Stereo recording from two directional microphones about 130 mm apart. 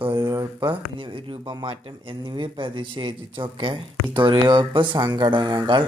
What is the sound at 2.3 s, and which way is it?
Speech, 40° right (ahead or behind).